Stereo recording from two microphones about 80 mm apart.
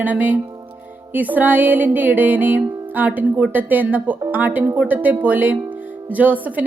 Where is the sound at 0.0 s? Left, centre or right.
Centre.